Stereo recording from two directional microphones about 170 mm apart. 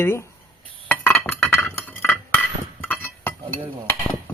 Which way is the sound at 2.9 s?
10° left (ahead or behind).